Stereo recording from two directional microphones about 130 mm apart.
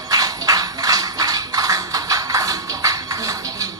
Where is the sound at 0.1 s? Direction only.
30° right (ahead or behind).